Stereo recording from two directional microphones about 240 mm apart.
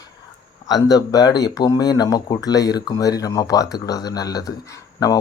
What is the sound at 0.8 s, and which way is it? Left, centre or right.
Speech, centre.